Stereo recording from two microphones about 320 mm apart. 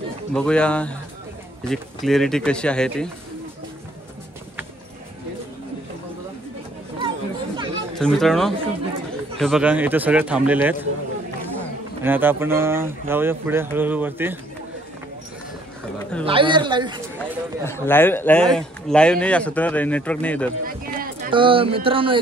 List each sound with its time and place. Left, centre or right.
0.3 s a man's voice: centre
7.0 s chatter: centre
8.0 s a man's voice: centre
12.0 s speech: centre
16.3 s speech: centre
17.2 s a man's voice: centre
20.6 s a sound: right
21.3 s speech: centre